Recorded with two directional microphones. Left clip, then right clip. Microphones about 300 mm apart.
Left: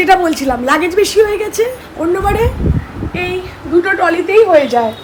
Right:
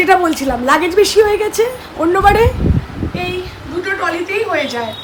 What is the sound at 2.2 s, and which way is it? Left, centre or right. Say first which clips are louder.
Speech: right 6 dB; right.